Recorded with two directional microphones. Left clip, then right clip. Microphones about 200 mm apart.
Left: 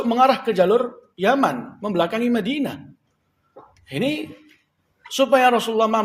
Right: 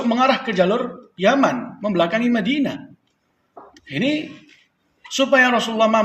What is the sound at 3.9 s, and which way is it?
Speech, 50° left (ahead or behind).